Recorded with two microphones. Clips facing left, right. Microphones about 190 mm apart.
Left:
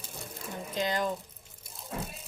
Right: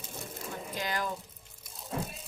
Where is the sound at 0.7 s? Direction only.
20° left (ahead or behind).